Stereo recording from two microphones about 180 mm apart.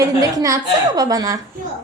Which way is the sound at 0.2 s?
20° right (ahead or behind).